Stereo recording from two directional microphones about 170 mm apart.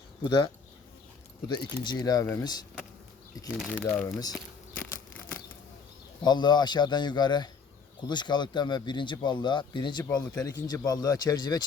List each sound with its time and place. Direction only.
0.2 s speech: 30° left (ahead or behind)
1.5 s speech: 25° left (ahead or behind)
3.5 s speech: 5° left (ahead or behind)
6.2 s speech: 25° left (ahead or behind)